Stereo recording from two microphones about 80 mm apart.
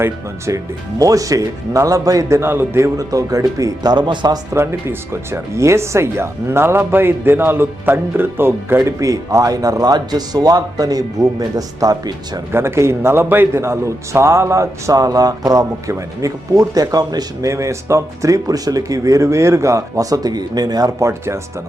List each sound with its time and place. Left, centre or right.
0.0 s speech: right
2.4 s speech: right
3.9 s speech: right
4.5 s speech: right
9.0 s speech: right
12.5 s a man's voice: right
17.5 s speech: right
21.0 s a man's voice: right